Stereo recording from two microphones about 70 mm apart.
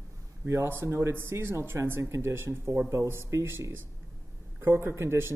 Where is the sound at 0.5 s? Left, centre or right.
Right.